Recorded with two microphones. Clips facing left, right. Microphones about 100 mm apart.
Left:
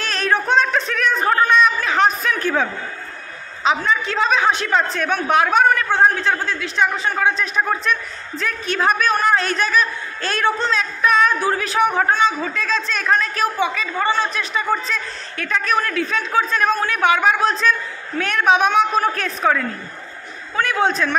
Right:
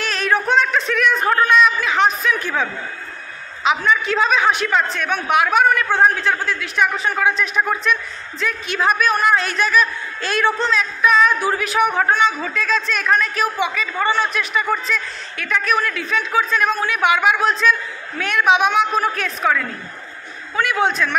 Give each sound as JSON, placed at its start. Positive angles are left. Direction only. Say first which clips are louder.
{"t": 0.0, "sound": "a sound", "louder": "right 1 dB", "side_deg": 35}
{"t": 3.6, "sound": "a man's voice", "louder": "right 1 dB", "side_deg": 30}
{"t": 20.8, "sound": "a man's voice", "louder": "left 1 dB", "side_deg": 35}